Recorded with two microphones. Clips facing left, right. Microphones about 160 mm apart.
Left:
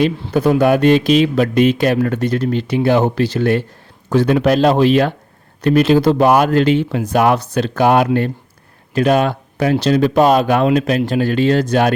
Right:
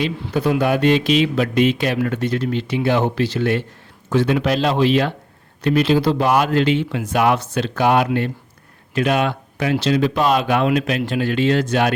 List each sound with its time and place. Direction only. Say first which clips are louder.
0.0 s speech: left 5 dB; 45° left (ahead or behind)